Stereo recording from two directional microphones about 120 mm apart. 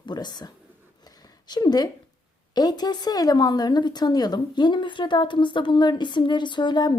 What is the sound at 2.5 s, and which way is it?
A woman's voice, 35° left (ahead or behind).